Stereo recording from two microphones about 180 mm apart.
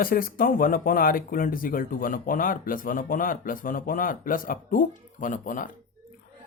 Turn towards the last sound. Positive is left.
turn(degrees=45)  # may be behind; listen again after turning